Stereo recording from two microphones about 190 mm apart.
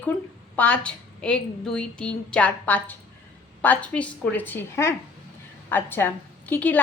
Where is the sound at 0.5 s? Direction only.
10° left (ahead or behind).